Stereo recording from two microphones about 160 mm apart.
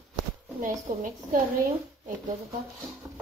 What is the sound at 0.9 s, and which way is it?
Speech, 60° right (ahead or behind).